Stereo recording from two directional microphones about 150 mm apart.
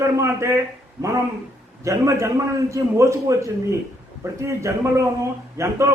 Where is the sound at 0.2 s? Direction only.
20° right (ahead or behind).